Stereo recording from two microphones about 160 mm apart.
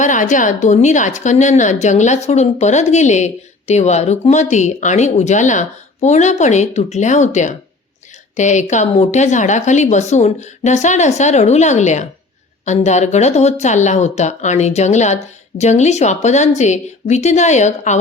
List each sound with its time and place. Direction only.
0.0 s a woman's voice: 50° left (ahead or behind)